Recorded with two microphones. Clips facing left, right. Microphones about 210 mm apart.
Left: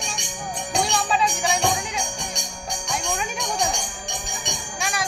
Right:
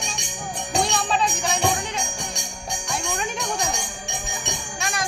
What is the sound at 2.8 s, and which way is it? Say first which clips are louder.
Jingle bell: even; 5° right (ahead or behind).